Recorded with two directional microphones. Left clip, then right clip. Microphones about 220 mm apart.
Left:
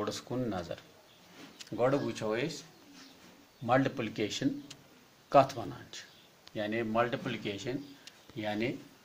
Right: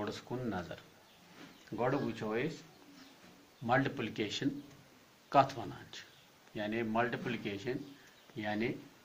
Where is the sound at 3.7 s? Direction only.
45° left (ahead or behind).